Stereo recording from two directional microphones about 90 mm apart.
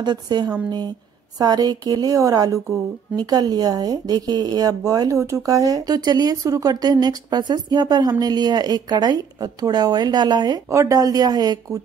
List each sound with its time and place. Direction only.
0.0 s speech: 50° right (ahead or behind)
10.7 s speech: 35° right (ahead or behind)